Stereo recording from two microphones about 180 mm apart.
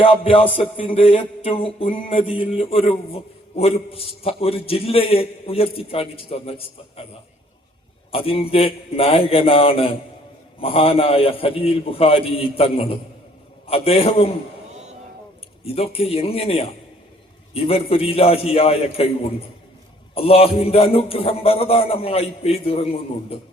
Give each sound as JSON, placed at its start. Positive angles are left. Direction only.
{"t": 0.0, "sound": "a man's voice", "side_deg": 30}
{"t": 8.1, "sound": "a man's voice", "side_deg": 30}
{"t": 15.6, "sound": "a man's voice", "side_deg": 35}
{"t": 20.1, "sound": "a man's voice", "side_deg": 35}